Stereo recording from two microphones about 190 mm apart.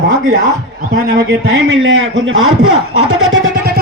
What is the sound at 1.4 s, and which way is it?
A man's voice, 90° right.